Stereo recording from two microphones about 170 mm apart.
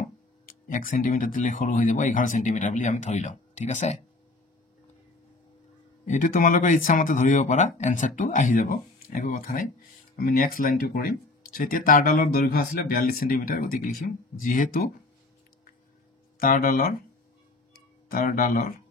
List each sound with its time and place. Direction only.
0.5 s speech: 55° left (ahead or behind)
6.0 s speech: 50° left (ahead or behind)
16.3 s speech: 55° left (ahead or behind)
18.1 s speech: 55° left (ahead or behind)